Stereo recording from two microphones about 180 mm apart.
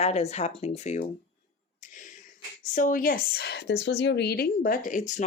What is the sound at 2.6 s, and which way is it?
A woman's voice, 45° left (ahead or behind).